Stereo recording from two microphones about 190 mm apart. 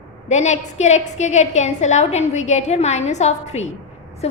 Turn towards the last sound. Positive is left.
turn(degrees=35)  # may be behind; listen again after turning